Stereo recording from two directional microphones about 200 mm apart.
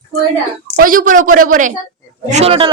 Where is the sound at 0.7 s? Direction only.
45° right (ahead or behind).